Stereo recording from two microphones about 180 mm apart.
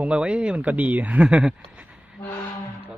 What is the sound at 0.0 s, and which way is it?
A man's voice, 5° right (ahead or behind).